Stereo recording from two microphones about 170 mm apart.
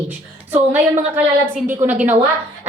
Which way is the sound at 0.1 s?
10° right (ahead or behind).